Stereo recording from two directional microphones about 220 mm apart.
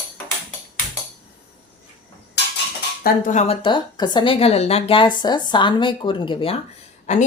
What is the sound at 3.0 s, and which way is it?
A woman's voice, 35° left (ahead or behind).